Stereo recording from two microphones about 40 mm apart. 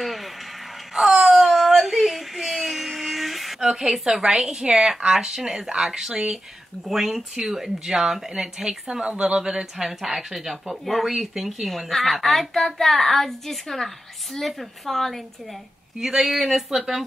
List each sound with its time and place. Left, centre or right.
0.0 s a sound: centre
4.0 s a woman's voice: centre
16.0 s a woman's voice: centre